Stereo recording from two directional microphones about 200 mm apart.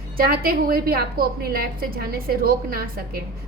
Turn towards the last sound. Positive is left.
turn(degrees=-50)  # may be behind; listen again after turning